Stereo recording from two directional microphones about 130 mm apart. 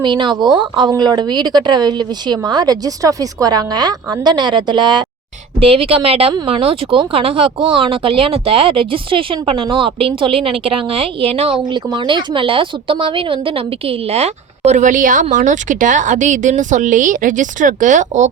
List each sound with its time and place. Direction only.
0.0 s a woman's voice: 35° right (ahead or behind)
5.5 s speech: 45° right (ahead or behind)
11.6 s speech: 35° right (ahead or behind); by 18.3 s 70° right (ahead or behind)